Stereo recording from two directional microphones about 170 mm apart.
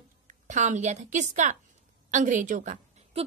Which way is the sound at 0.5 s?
45° right (ahead or behind).